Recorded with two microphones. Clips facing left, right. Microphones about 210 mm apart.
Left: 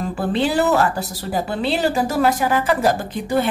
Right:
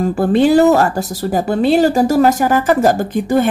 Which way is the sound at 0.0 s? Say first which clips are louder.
Right 8 dB; 45° right (ahead or behind).